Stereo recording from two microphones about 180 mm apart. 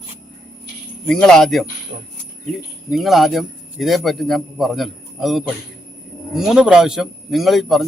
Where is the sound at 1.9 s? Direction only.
45° right (ahead or behind).